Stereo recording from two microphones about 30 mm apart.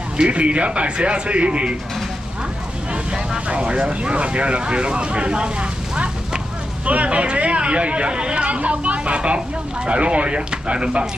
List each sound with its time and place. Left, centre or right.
0.2 s speech: right
3.4 s speech: right
6.9 s speech: right
8.5 s a woman's voice: right